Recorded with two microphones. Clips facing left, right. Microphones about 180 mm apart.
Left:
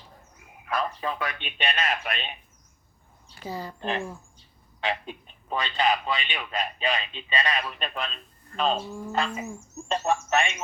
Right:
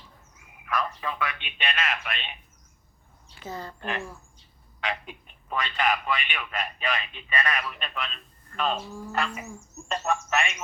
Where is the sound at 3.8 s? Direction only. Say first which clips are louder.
Left 3 dB; 30° left (ahead or behind).